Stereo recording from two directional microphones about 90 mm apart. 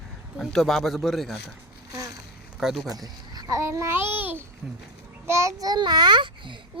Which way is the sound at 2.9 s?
45° right (ahead or behind).